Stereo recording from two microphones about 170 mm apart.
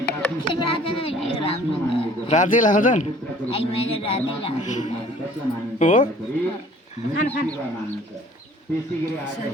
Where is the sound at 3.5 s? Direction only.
35° left (ahead or behind).